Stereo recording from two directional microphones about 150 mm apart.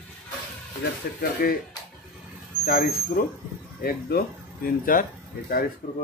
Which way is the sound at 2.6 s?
65° left (ahead or behind).